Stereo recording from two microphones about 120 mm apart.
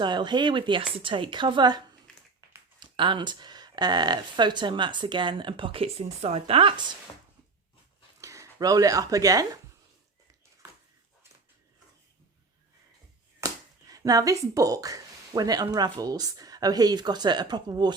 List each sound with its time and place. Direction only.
0.0 s speech: 40° right (ahead or behind)
2.1 s a sound: 10° left (ahead or behind)
2.8 s speech: 45° right (ahead or behind)
8.2 s speech: 25° right (ahead or behind)
13.4 s speech: 30° right (ahead or behind)